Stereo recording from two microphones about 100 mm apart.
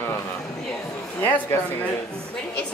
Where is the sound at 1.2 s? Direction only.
20° left (ahead or behind).